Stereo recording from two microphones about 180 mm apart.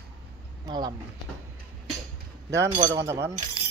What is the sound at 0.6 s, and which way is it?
Speech, 20° right (ahead or behind).